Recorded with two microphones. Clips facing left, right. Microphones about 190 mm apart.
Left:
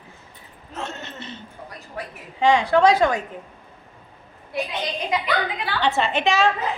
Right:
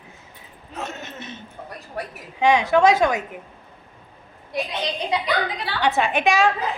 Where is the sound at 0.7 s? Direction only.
15° right (ahead or behind).